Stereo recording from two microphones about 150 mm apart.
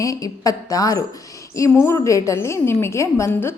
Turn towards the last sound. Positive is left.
turn(degrees=20)  # may be behind; listen again after turning